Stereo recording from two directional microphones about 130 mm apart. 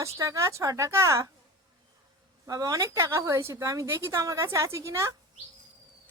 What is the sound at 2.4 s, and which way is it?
A woman's voice, 25° right (ahead or behind).